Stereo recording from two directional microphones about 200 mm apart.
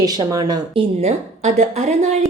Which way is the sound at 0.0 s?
20° right (ahead or behind).